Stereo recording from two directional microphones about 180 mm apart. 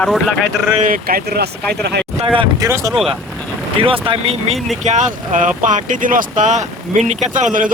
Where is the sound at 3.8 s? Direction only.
30° right (ahead or behind); by 7.7 s 45° right (ahead or behind).